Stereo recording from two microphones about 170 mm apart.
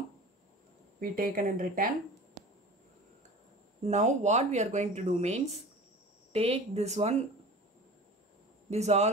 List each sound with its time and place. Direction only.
0.9 s speech: 55° right (ahead or behind)
3.8 s speech: 40° right (ahead or behind)
8.6 s speech: 40° right (ahead or behind)